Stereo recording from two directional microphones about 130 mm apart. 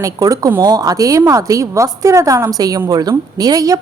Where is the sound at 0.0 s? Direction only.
25° right (ahead or behind).